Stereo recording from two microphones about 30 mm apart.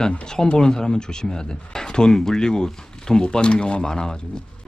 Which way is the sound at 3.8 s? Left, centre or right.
Left.